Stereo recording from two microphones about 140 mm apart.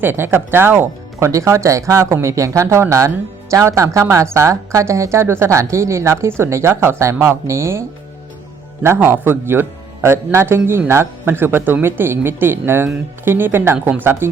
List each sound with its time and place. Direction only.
0.0 s a man's voice: 15° right (ahead or behind)